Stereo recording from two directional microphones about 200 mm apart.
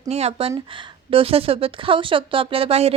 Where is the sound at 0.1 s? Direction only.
30° right (ahead or behind).